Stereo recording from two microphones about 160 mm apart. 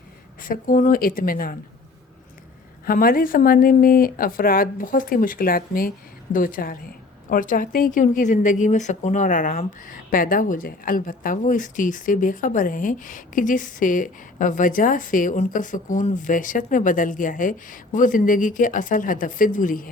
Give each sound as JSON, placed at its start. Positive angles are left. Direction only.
{"t": 0.4, "sound": "speech", "side_deg": 60}
{"t": 2.8, "sound": "speech", "side_deg": 65}